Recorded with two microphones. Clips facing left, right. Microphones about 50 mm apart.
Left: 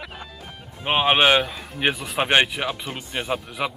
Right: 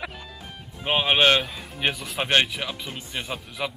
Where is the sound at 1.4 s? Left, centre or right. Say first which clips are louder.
Left 3 dB; centre.